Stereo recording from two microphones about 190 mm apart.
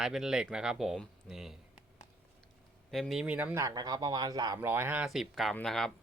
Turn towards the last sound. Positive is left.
turn(degrees=5)  # may be behind; listen again after turning